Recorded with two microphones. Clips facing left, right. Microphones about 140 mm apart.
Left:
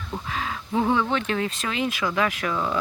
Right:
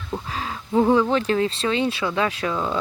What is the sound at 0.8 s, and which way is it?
Speech, 30° right (ahead or behind).